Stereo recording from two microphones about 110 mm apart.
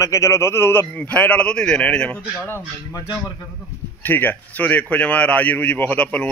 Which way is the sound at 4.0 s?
15° left (ahead or behind).